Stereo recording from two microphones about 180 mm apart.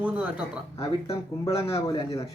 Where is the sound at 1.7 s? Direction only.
35° left (ahead or behind).